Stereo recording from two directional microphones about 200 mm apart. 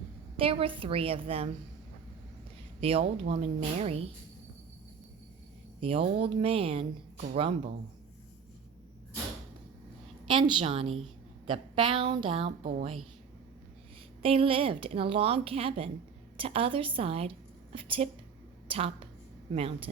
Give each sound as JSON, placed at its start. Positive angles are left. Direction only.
{"t": 0.3, "sound": "speech", "side_deg": -30}
{"t": 2.8, "sound": "speech", "side_deg": -30}
{"t": 5.8, "sound": "speech", "side_deg": -25}
{"t": 10.2, "sound": "speech", "side_deg": -25}
{"t": 14.2, "sound": "speech", "side_deg": -30}